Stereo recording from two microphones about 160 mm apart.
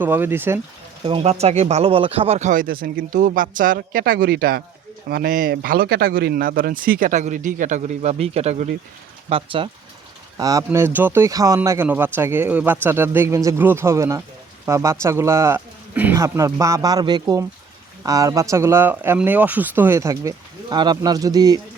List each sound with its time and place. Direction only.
0.0 s speech: 10° right (ahead or behind)
1.0 s speech: 40° right (ahead or behind)
10.3 s speech: 20° right (ahead or behind)